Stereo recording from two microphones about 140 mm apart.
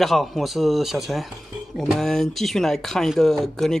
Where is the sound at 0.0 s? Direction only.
Centre (ahead or behind).